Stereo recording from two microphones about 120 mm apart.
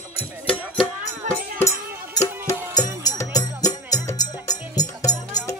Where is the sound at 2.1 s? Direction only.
30° left (ahead or behind).